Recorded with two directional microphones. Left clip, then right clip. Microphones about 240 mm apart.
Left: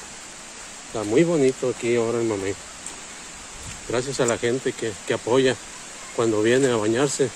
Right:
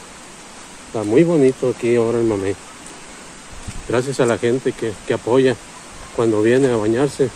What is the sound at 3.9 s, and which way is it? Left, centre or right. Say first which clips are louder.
Speech: right 6 dB; centre.